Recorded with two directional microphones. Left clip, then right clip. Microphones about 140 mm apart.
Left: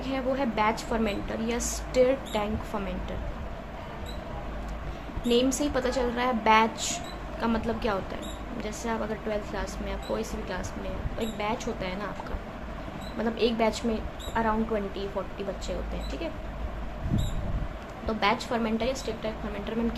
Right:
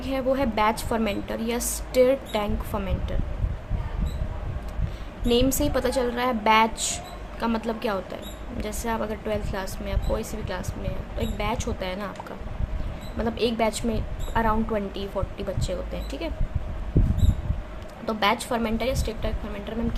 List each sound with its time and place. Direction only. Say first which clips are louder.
0.0 s a woman's voice: right 4 dB; 30° right (ahead or behind)
5.3 s a woman's voice: right 3 dB; 30° right (ahead or behind)
13.1 s a woman's voice: right 2 dB; 30° right (ahead or behind)
18.0 s a woman's voice: right 3 dB; 35° right (ahead or behind)